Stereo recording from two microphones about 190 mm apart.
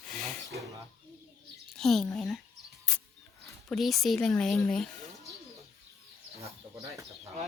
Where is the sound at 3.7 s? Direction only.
Centre (ahead or behind).